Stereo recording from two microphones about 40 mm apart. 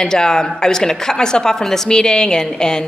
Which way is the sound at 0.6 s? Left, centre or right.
Centre.